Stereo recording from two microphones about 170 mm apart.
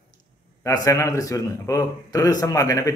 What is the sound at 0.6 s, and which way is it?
Speech, 20° left (ahead or behind).